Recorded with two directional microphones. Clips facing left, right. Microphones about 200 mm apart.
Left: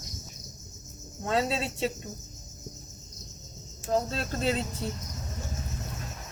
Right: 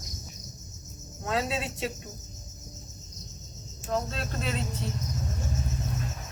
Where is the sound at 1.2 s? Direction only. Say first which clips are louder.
Left 2 dB; 30° left (ahead or behind).